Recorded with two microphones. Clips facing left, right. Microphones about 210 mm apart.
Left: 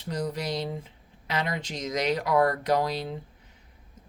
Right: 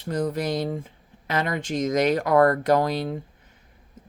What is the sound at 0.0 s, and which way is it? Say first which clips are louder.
Speech: right 5 dB; 50° right (ahead or behind).